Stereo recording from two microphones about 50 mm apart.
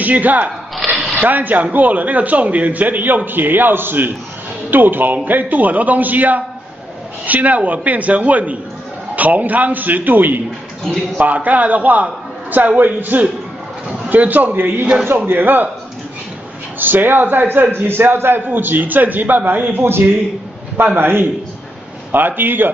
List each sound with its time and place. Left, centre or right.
0.0 s a man's voice: right
16.8 s a man's voice: right
21.0 s a man's voice: right